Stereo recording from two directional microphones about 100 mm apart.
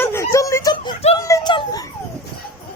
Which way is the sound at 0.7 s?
50° left (ahead or behind).